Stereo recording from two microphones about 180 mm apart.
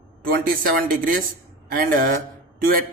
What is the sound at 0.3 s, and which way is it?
A man's voice, 55° right (ahead or behind).